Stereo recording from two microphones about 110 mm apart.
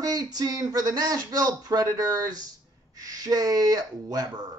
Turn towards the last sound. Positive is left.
turn(degrees=-35)  # may be behind; listen again after turning